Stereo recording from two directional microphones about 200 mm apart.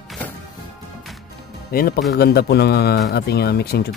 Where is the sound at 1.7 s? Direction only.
50° left (ahead or behind).